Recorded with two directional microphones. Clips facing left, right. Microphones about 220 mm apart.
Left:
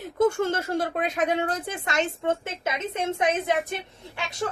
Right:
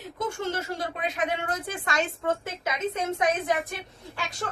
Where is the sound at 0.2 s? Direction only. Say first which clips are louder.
Left 8 dB; 55° left (ahead or behind); by 3.8 s 25° left (ahead or behind).